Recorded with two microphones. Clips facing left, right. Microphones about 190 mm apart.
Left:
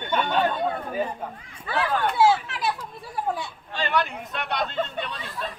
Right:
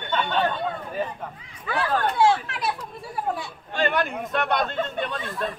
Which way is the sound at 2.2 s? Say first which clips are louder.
Left 2 dB; 5° left (ahead or behind).